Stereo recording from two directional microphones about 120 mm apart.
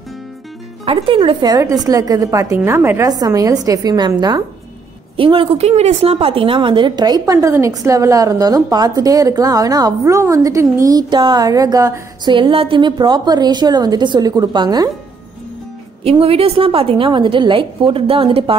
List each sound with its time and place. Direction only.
0.8 s a woman's voice: 50° right (ahead or behind)
1.6 s a woman's voice: 30° right (ahead or behind)
5.1 s a woman's voice: 50° right (ahead or behind); by 12.4 s 30° right (ahead or behind)
12.4 s a woman's voice: 45° right (ahead or behind)
16.0 s a woman's voice: 55° right (ahead or behind)